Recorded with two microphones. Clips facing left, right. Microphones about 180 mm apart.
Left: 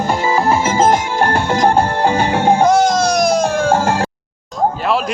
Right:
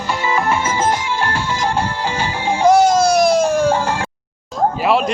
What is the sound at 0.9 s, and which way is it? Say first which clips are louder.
Music: left 5 dB; 50° left (ahead or behind).